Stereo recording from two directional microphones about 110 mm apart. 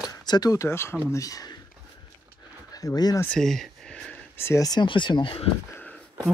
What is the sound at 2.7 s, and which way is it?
Speech, 35° left (ahead or behind).